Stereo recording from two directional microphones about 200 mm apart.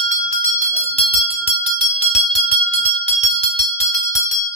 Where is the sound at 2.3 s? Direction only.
35° left (ahead or behind).